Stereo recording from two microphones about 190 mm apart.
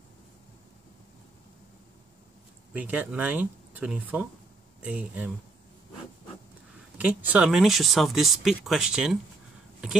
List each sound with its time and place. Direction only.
2.7 s speech: 10° right (ahead or behind)
7.0 s speech: 10° right (ahead or behind)